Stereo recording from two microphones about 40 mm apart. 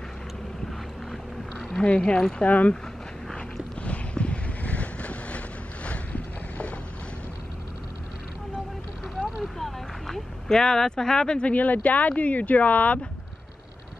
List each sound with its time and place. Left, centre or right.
1.7 s speech: centre
2.4 s speech: left
3.8 s boat: left
5.9 s vehicle: left
9.4 s a sound: centre
10.6 s speech: centre
11.5 s speech: left